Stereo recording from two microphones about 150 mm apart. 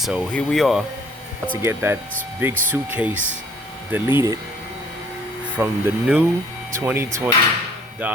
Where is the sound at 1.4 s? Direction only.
15° right (ahead or behind).